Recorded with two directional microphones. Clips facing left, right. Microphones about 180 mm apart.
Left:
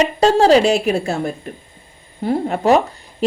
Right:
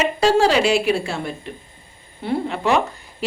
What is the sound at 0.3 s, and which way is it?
Speech, 40° left (ahead or behind).